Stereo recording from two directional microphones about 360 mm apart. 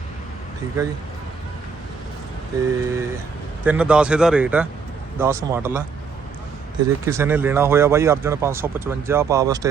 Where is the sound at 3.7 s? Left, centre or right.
Centre.